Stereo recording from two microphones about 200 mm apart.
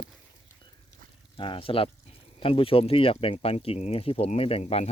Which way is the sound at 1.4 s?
25° left (ahead or behind).